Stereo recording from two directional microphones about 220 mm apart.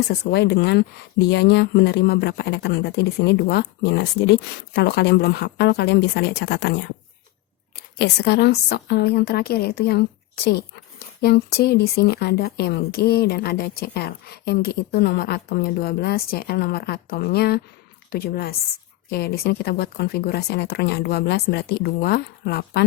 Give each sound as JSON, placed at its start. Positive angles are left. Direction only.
{"t": 0.1, "sound": "a woman's voice", "side_deg": 50}
{"t": 7.8, "sound": "a woman's voice", "side_deg": 50}